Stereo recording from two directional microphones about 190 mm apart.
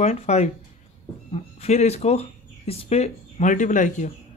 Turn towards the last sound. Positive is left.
turn(degrees=40)  # may be behind; listen again after turning